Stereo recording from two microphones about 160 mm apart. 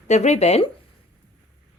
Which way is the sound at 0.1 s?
45° left (ahead or behind).